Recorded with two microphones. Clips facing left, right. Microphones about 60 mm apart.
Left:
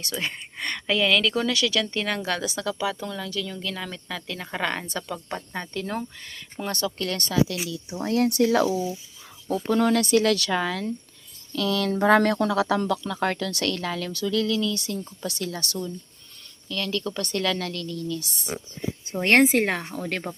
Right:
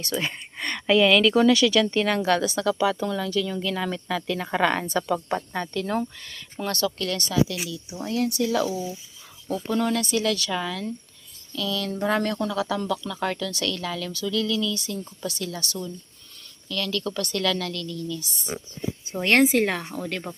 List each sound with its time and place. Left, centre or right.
0.0 s speech: centre
5.5 s speech: centre
6.2 s speech: centre
6.7 s speech: left
7.2 s speech: left
8.7 s speech: centre
9.6 s speech: left
10.0 s speech: left
10.5 s speech: left
11.5 s speech: left
19.2 s speech: left